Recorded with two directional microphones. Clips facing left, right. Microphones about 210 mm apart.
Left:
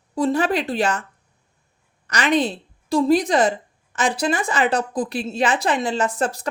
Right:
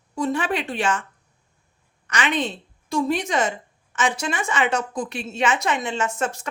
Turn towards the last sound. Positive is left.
turn(degrees=35)  # may be behind; listen again after turning